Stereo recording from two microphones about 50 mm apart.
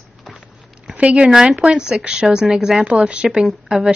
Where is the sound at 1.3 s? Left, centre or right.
Centre.